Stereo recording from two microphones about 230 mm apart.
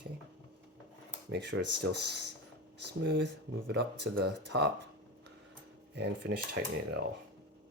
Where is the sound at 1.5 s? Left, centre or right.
Right.